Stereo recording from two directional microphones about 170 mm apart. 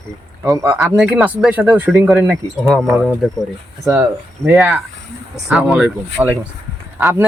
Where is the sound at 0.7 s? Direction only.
5° right (ahead or behind).